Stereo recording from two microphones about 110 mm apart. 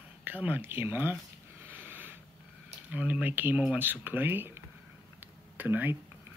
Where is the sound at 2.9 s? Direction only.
15° right (ahead or behind).